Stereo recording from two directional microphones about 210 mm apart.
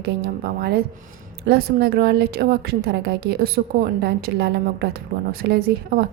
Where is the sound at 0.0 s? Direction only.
50° right (ahead or behind).